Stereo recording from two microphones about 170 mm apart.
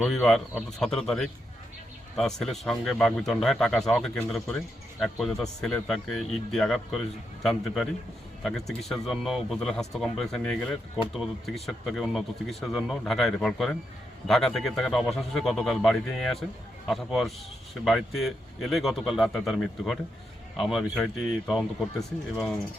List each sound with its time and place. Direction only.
0.0 s speech: centre (ahead or behind)